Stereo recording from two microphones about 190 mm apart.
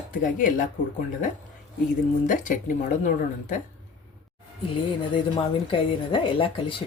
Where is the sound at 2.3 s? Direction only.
45° left (ahead or behind).